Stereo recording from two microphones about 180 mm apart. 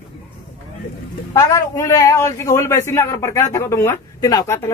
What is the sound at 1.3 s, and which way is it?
A man's voice, 15° left (ahead or behind).